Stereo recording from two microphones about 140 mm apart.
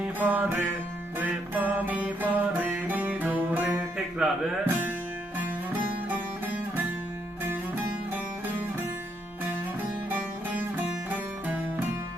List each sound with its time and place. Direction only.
0.2 s music: 10° right (ahead or behind)
6.1 s music: 15° right (ahead or behind)
10.1 s music: 15° right (ahead or behind)